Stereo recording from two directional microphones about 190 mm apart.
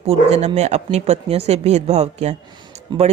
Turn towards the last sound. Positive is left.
turn(degrees=-25)  # may be behind; listen again after turning